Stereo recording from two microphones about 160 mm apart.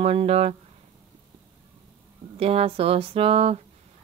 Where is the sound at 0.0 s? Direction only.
35° right (ahead or behind).